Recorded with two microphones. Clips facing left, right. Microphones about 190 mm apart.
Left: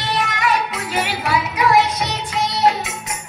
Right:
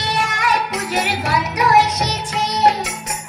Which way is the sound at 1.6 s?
45° right (ahead or behind).